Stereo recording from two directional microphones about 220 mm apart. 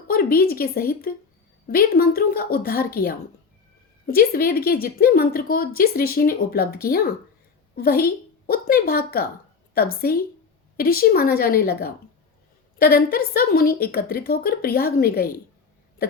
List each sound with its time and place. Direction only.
0.1 s a woman's voice: 40° left (ahead or behind)